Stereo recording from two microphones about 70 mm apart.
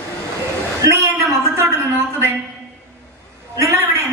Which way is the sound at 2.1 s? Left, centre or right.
Right.